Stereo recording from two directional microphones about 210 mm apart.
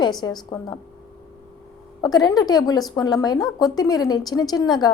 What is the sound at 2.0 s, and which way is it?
A woman's voice, 20° left (ahead or behind).